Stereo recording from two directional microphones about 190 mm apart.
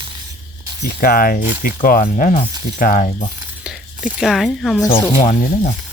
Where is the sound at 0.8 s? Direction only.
50° left (ahead or behind).